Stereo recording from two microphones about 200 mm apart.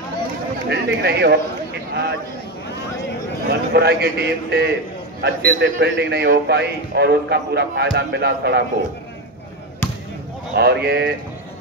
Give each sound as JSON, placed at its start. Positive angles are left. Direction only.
{"t": 0.7, "sound": "a man's voice", "side_deg": -55}
{"t": 3.4, "sound": "a man's voice", "side_deg": -55}
{"t": 10.5, "sound": "speech", "side_deg": -55}